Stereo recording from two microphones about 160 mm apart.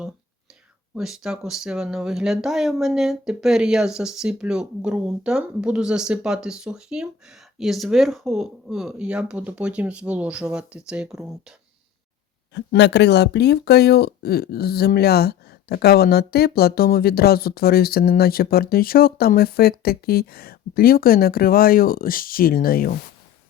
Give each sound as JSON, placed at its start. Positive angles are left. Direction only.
{"t": 0.9, "sound": "speech", "side_deg": -5}
{"t": 12.5, "sound": "speech", "side_deg": 90}